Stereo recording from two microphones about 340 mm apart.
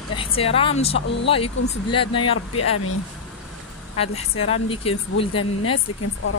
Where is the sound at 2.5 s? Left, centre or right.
Left.